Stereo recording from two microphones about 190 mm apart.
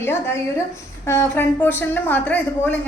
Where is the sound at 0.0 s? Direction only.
15° left (ahead or behind).